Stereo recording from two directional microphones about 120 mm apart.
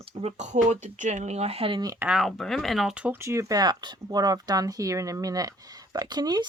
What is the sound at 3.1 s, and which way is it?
Speech, 25° right (ahead or behind).